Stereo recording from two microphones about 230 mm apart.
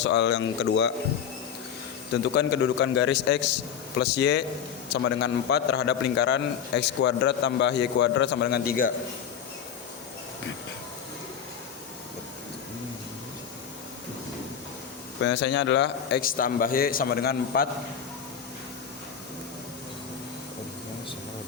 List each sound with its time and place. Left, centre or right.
0.0 s a man's voice: left
2.2 s a man's voice: left
15.2 s a man's voice: left